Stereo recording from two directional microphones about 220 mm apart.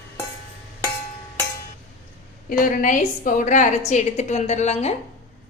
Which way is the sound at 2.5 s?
40° left (ahead or behind).